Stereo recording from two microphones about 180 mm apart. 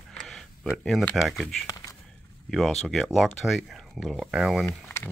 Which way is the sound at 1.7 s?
20° left (ahead or behind).